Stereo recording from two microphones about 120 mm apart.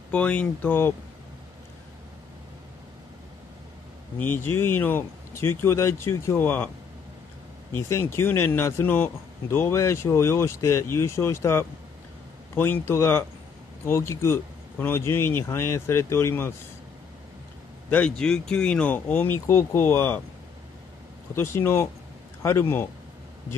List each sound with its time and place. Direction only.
0.1 s speech: 10° left (ahead or behind)
4.2 s speech: 15° left (ahead or behind)
7.7 s speech: 20° left (ahead or behind)
17.8 s speech: 10° left (ahead or behind)
21.4 s speech: 20° left (ahead or behind)